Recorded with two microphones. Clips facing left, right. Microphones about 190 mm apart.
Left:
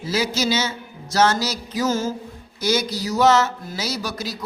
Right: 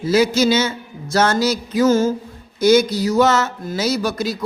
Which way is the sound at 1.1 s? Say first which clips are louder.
Right 3 dB; 55° right (ahead or behind).